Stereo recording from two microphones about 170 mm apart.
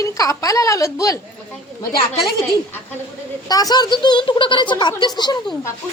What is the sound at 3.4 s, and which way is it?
A woman's voice, 25° left (ahead or behind).